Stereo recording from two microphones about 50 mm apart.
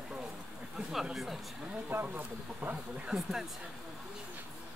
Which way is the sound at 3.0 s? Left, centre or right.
Centre.